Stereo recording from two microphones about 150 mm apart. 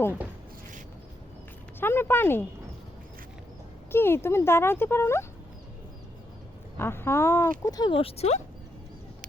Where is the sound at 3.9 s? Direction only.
15° left (ahead or behind).